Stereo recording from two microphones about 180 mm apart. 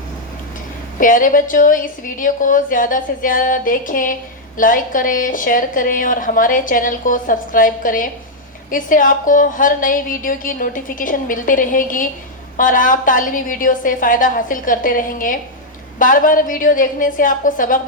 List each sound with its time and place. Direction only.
0.9 s a woman's voice: 50° left (ahead or behind)